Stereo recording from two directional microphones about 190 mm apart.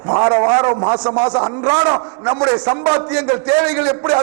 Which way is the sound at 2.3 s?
10° right (ahead or behind).